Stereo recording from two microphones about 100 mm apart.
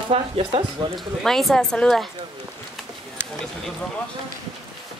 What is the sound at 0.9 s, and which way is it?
Speech, 5° left (ahead or behind).